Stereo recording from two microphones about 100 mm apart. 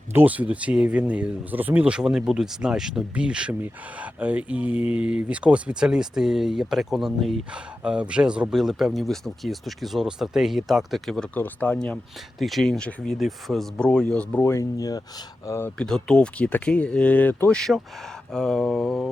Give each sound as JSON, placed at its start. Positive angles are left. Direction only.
{"t": 0.1, "sound": "speech", "side_deg": -15}
{"t": 11.3, "sound": "speech", "side_deg": 20}
{"t": 12.4, "sound": "speech", "side_deg": 0}
{"t": 14.4, "sound": "speech", "side_deg": 30}
{"t": 15.8, "sound": "speech", "side_deg": 5}
{"t": 17.6, "sound": "speech", "side_deg": 0}